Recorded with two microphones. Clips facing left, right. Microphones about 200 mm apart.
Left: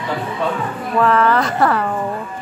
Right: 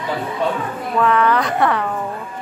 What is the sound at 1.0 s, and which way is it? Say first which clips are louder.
Speech: left 1 dB; centre (ahead or behind).